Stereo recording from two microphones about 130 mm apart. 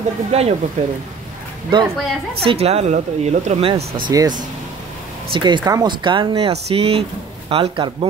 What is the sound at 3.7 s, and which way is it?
Speech, 40° right (ahead or behind).